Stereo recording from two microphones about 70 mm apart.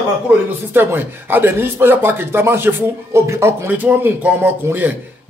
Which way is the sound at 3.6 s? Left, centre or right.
Right.